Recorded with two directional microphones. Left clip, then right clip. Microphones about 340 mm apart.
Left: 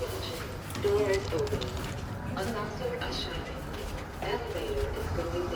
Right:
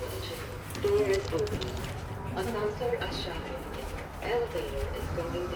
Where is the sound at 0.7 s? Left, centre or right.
Centre.